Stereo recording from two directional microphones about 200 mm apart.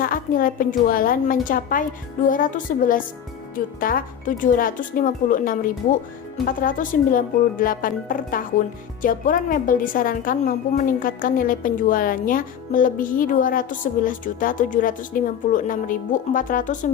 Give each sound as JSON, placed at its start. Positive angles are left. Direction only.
{"t": 0.0, "sound": "speech", "side_deg": 45}